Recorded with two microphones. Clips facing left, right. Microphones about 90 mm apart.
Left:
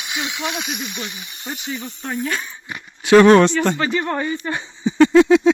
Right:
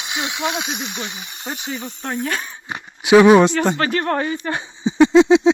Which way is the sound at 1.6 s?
15° right (ahead or behind).